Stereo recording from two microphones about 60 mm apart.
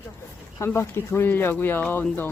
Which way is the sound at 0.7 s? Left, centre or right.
Left.